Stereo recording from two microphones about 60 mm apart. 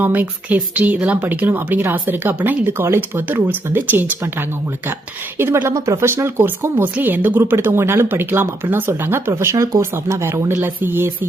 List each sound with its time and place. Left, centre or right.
0.0 s speech: right
5.7 s speech: right
6.0 s speech: right
10.5 s speech: right